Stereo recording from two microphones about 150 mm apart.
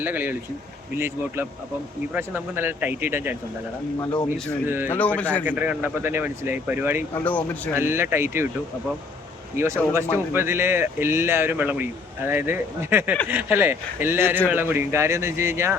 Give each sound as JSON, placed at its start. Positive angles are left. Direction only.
{"t": 0.0, "sound": "speech", "side_deg": -15}
{"t": 4.6, "sound": "speech", "side_deg": -15}
{"t": 4.9, "sound": "a man's voice", "side_deg": 10}
{"t": 5.5, "sound": "speech", "side_deg": -10}
{"t": 7.3, "sound": "a man's voice", "side_deg": 10}
{"t": 7.7, "sound": "speech", "side_deg": -15}
{"t": 9.6, "sound": "speech", "side_deg": -15}